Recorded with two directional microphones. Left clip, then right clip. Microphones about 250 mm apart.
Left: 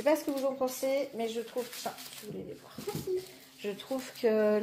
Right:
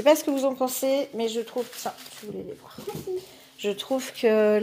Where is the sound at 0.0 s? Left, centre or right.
Right.